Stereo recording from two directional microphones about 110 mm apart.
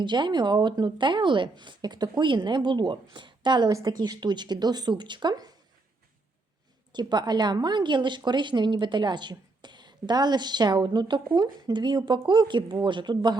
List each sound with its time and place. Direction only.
0.0 s speech: 45° right (ahead or behind)
6.9 s speech: 40° right (ahead or behind)